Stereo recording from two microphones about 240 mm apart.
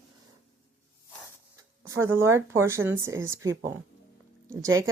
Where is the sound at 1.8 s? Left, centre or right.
Centre.